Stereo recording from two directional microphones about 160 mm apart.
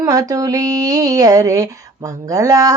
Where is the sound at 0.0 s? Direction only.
20° right (ahead or behind).